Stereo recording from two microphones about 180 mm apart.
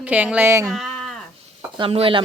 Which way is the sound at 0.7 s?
Centre (ahead or behind).